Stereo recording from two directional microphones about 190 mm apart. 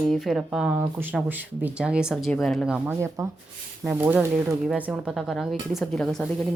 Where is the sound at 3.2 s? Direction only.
15° right (ahead or behind); by 6.2 s centre (ahead or behind).